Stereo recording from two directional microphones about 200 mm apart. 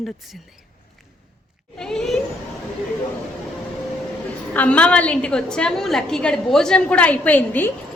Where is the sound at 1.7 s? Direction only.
5° left (ahead or behind).